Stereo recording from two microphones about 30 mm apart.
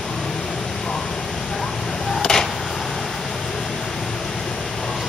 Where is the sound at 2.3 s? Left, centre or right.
Centre.